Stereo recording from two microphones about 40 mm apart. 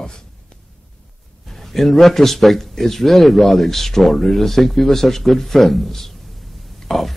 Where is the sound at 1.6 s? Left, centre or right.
Centre.